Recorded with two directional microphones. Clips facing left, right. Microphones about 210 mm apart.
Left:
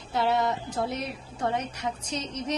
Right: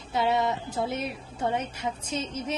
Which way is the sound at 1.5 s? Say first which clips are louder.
Even; 25° right (ahead or behind).